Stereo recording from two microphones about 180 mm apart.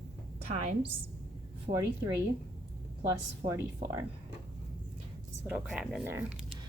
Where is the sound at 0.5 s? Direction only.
35° right (ahead or behind).